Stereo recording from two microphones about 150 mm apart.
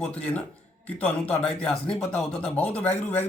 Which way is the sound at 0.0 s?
10° left (ahead or behind).